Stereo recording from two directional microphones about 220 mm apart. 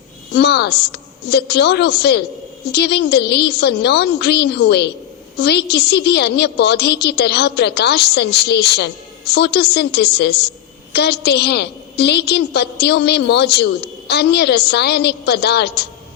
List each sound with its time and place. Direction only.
0.3 s a woman's voice: 50° left (ahead or behind)